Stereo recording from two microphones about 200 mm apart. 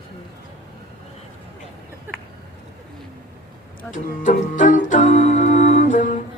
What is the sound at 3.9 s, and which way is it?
Music, 40° left (ahead or behind).